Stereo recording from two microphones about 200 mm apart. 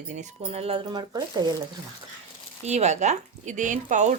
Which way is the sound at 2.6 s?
35° right (ahead or behind).